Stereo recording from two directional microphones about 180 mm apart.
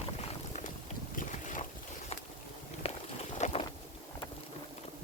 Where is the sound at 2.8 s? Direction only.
35° left (ahead or behind).